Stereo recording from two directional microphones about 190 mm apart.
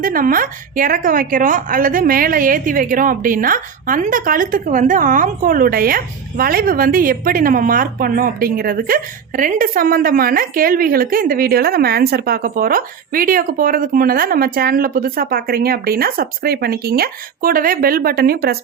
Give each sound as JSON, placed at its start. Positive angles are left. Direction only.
{"t": 0.0, "sound": "a woman's voice", "side_deg": -50}